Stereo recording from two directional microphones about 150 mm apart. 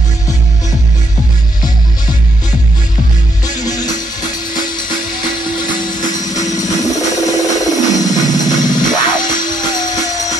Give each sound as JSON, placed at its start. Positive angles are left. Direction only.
{"t": 3.6, "sound": "music", "side_deg": 25}
{"t": 6.5, "sound": "music", "side_deg": 25}